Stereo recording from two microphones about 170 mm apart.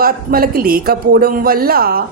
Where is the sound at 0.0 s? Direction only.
60° right (ahead or behind).